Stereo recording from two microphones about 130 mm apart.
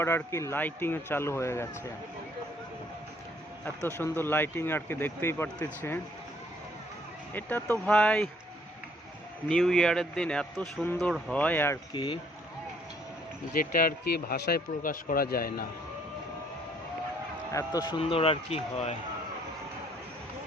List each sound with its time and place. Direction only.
0.0 s a man's voice: 20° left (ahead or behind)
3.9 s speech: 20° left (ahead or behind)
7.3 s a man's voice: 15° left (ahead or behind)
9.5 s a man's voice: 5° left (ahead or behind)
11.9 s speech: 40° left (ahead or behind)
13.5 s speech: 90° left
17.5 s a man's voice: 25° left (ahead or behind)
18.0 s speech: 50° left (ahead or behind)